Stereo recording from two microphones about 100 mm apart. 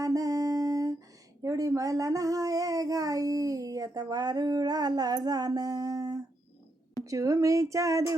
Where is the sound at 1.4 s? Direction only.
35° right (ahead or behind).